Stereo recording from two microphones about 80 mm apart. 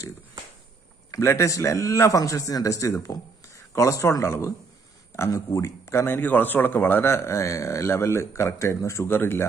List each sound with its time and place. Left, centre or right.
1.2 s speech: left